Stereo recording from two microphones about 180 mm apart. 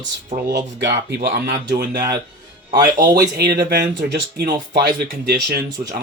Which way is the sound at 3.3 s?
65° right (ahead or behind).